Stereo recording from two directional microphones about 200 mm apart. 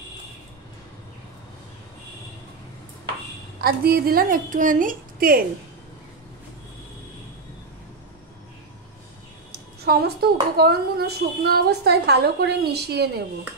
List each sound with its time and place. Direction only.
3.6 s a woman's voice: 50° right (ahead or behind)
9.5 s a woman's voice: 55° right (ahead or behind)